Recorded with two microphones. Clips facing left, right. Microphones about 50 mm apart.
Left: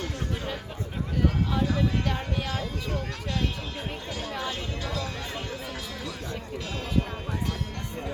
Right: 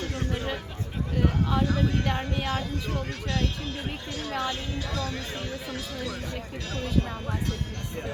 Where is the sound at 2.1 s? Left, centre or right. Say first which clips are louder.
Right 2 dB; right.